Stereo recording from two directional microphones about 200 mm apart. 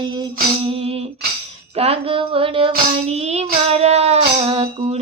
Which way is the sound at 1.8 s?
30° right (ahead or behind).